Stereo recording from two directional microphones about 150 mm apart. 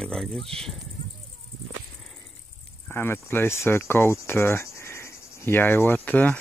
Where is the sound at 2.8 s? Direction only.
15° left (ahead or behind).